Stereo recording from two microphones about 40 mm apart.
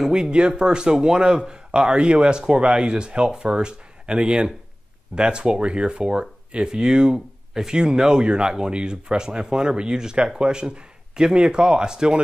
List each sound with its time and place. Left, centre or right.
0.1 s speech: right